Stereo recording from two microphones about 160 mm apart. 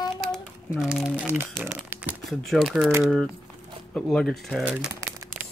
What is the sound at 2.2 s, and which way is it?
Speech, centre (ahead or behind).